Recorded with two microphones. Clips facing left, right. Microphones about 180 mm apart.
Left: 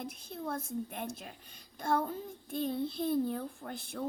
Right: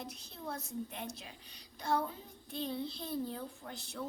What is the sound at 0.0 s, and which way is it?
A child's voice, 50° left (ahead or behind).